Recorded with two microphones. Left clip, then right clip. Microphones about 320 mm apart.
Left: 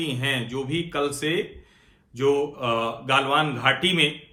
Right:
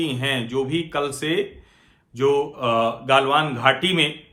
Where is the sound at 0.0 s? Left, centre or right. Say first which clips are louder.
Right 2 dB; centre.